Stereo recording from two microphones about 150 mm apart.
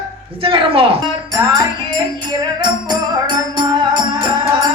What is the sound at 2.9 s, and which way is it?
A woman's voice, 30° right (ahead or behind).